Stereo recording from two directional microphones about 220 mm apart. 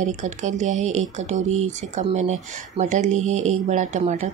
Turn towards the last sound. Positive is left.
turn(degrees=-30)  # may be behind; listen again after turning